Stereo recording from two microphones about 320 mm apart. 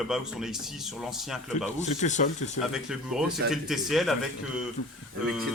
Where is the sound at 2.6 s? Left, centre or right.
Centre.